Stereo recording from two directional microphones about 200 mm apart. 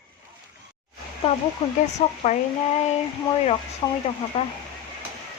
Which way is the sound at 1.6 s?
35° left (ahead or behind).